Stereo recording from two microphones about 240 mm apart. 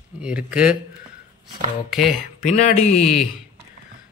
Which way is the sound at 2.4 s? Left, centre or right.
Left.